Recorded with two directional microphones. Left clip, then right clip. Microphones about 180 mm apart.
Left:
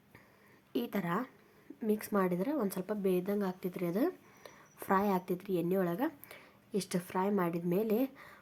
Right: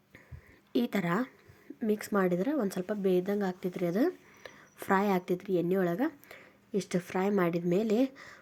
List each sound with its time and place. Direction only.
0.7 s a woman's voice: 20° right (ahead or behind)